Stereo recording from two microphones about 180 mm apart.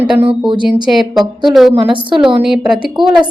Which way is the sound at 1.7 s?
25° right (ahead or behind).